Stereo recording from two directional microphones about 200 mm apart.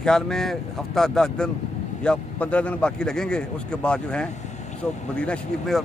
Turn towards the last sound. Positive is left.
turn(degrees=5)  # may be behind; listen again after turning